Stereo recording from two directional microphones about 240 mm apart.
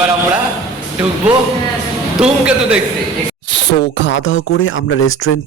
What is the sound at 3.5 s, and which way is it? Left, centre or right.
Speech, left.